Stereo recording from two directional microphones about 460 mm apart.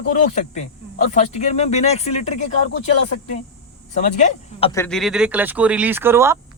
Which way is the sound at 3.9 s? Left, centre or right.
Centre.